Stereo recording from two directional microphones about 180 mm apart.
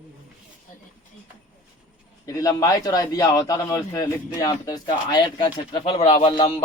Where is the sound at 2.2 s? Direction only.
20° left (ahead or behind).